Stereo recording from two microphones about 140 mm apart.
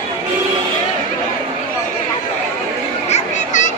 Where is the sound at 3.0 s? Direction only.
55° left (ahead or behind).